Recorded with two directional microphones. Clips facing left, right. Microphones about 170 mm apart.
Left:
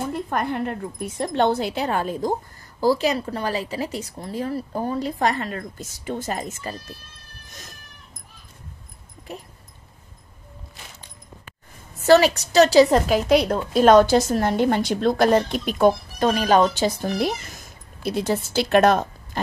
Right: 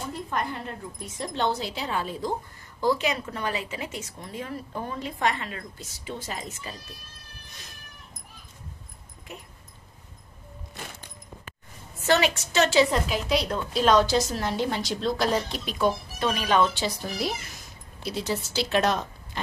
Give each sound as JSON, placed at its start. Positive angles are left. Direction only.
{"t": 0.0, "sound": "a woman's voice", "side_deg": 55}
{"t": 2.8, "sound": "a woman's voice", "side_deg": 35}
{"t": 9.3, "sound": "a woman's voice", "side_deg": 35}
{"t": 12.0, "sound": "a woman's voice", "side_deg": 35}